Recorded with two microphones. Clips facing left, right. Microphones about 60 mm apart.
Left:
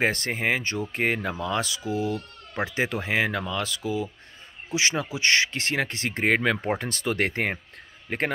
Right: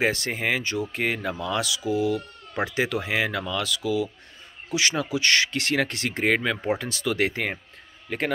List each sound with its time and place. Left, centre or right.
0.0 s speech: left
0.3 s speech: left